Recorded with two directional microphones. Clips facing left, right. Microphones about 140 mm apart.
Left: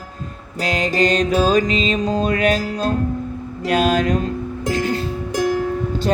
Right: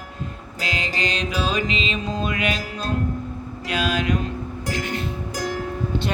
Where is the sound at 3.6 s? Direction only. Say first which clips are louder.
Left 6 dB; 45° left (ahead or behind).